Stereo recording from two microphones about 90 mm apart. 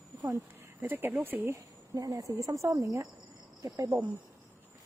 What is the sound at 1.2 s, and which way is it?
Speech, 25° right (ahead or behind).